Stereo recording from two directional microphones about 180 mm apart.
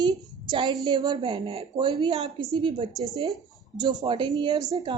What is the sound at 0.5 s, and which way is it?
Speech, 25° right (ahead or behind).